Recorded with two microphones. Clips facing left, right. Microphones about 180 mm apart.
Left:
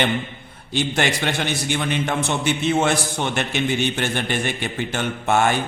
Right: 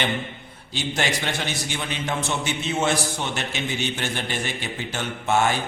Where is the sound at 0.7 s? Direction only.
55° left (ahead or behind).